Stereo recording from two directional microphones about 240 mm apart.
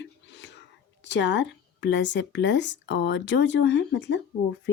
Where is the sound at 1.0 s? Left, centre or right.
Left.